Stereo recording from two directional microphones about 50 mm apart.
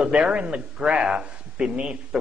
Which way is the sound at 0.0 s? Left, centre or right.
Right.